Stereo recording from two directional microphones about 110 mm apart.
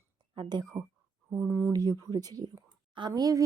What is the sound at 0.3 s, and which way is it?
Speech, 40° right (ahead or behind).